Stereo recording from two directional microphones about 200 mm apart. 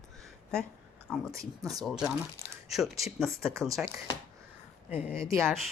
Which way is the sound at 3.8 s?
Centre (ahead or behind).